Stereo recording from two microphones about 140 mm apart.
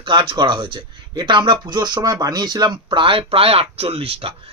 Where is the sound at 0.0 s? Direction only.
35° right (ahead or behind).